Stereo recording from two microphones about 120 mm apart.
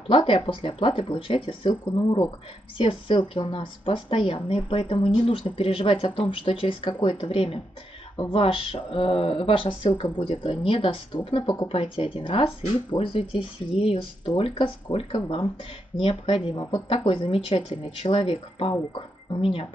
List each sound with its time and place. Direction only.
0.3 s speech: 45° left (ahead or behind)